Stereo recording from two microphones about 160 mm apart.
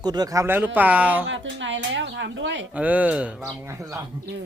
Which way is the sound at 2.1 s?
90° right.